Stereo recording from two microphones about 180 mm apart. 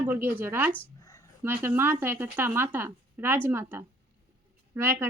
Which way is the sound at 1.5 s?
10° right (ahead or behind).